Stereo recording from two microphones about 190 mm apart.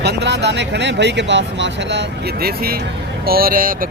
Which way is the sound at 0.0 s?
65° right (ahead or behind).